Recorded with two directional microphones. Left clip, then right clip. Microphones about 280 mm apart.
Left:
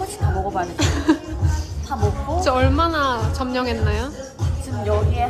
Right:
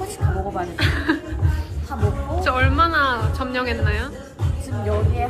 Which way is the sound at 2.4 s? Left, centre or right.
Centre.